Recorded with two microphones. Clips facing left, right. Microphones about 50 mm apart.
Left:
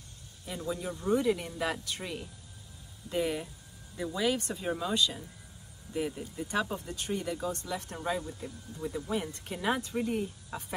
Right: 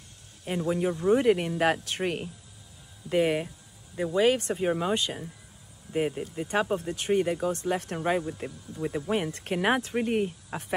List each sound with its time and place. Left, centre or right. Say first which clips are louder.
0.5 s speech: right 8 dB; right
3.9 s speech: right 7 dB; right